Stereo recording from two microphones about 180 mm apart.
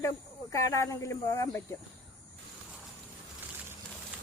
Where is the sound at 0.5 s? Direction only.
15° left (ahead or behind).